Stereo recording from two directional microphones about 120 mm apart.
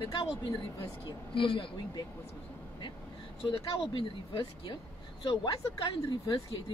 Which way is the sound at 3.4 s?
50° left (ahead or behind).